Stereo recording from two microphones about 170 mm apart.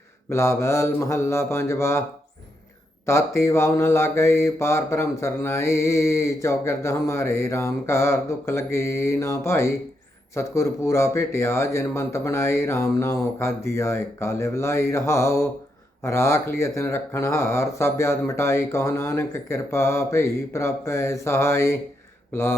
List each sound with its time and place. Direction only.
0.3 s speech: 15° left (ahead or behind)
3.1 s speech: 15° left (ahead or behind)